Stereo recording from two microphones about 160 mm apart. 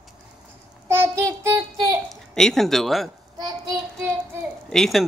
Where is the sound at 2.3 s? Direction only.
Centre (ahead or behind).